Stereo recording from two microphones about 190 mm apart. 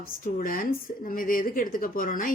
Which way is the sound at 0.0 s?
50° left (ahead or behind).